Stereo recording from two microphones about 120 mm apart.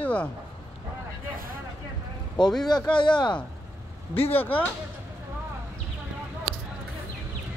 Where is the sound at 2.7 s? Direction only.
40° left (ahead or behind).